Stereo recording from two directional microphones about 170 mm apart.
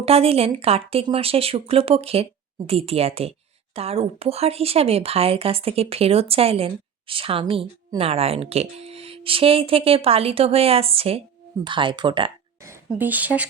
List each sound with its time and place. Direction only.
0.0 s a woman's voice: 35° right (ahead or behind)
12.6 s speech: 15° right (ahead or behind)